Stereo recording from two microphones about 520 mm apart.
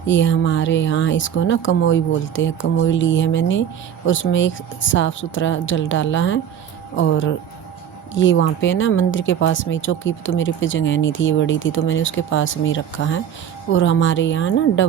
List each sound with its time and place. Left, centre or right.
0.0 s speech: left